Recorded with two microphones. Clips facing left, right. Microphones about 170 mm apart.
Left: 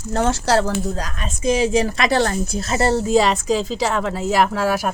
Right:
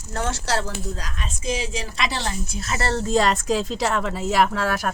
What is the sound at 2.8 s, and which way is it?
Speech, 10° left (ahead or behind).